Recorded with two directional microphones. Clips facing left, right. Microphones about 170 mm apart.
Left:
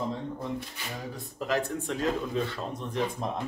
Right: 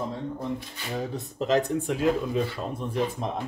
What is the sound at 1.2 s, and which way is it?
Speech, 20° right (ahead or behind).